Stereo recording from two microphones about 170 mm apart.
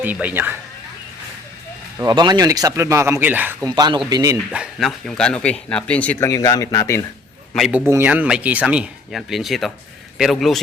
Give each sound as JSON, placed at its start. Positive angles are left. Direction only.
{"t": 0.0, "sound": "speech", "side_deg": -10}
{"t": 2.0, "sound": "speech", "side_deg": -25}
{"t": 3.7, "sound": "speech", "side_deg": -25}
{"t": 4.5, "sound": "a man's voice", "side_deg": -5}
{"t": 7.5, "sound": "a man's voice", "side_deg": 0}
{"t": 7.9, "sound": "a man's voice", "side_deg": -10}